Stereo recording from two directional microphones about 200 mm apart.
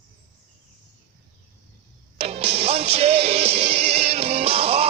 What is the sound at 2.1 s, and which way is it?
Music, 30° right (ahead or behind).